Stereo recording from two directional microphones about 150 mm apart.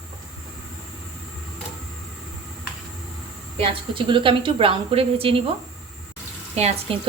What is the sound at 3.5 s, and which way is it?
Speech, 35° right (ahead or behind).